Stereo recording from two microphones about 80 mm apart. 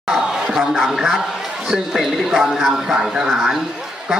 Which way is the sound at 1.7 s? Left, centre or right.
Centre.